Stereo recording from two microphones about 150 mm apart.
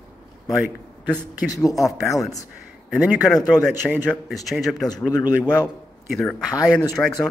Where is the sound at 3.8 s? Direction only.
5° left (ahead or behind).